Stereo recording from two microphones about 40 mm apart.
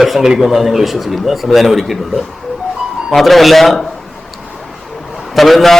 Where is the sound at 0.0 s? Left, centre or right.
Centre.